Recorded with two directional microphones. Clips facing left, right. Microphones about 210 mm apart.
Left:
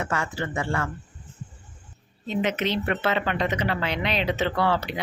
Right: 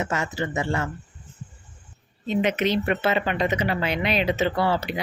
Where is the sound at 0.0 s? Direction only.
20° right (ahead or behind).